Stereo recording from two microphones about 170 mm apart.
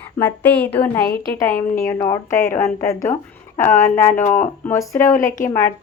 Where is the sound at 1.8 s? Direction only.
15° left (ahead or behind).